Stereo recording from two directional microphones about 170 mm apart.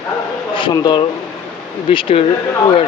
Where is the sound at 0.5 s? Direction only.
25° left (ahead or behind).